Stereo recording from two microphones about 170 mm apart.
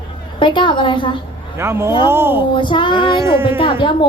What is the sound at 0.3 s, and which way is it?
Speech, 30° left (ahead or behind).